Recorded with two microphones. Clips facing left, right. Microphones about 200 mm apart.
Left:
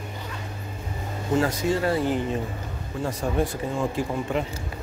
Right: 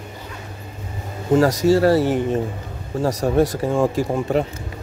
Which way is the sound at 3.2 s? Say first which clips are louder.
Right 7 dB; 45° right (ahead or behind).